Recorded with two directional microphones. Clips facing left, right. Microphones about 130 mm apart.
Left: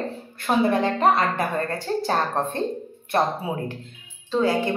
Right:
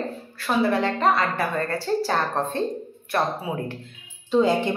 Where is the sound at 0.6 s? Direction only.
20° left (ahead or behind).